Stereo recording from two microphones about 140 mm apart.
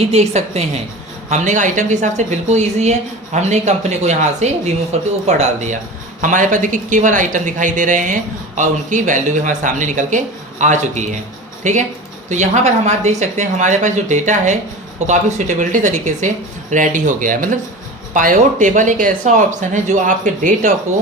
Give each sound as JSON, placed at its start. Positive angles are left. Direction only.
{"t": 0.0, "sound": "a woman's voice", "side_deg": -50}
{"t": 1.3, "sound": "speech", "side_deg": -60}
{"t": 6.2, "sound": "speech", "side_deg": -65}